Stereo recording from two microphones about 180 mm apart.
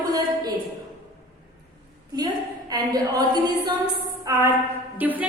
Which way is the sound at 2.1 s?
20° right (ahead or behind).